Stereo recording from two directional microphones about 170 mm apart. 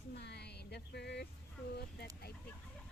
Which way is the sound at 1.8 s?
70° left (ahead or behind).